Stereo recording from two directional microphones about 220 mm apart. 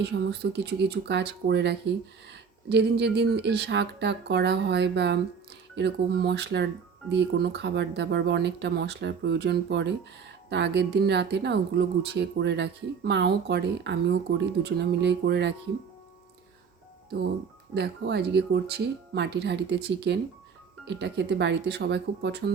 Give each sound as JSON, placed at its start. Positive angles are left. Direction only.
{"t": 0.0, "sound": "a woman's voice", "side_deg": -50}
{"t": 17.7, "sound": "a woman's voice", "side_deg": -50}